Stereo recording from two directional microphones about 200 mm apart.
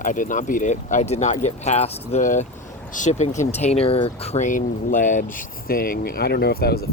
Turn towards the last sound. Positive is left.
turn(degrees=50)  # may be behind; listen again after turning